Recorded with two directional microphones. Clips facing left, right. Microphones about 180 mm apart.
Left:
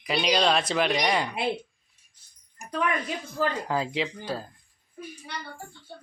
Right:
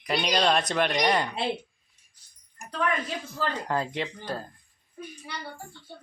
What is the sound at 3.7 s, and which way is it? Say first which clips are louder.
Speech: left 1 dB; 5° left (ahead or behind).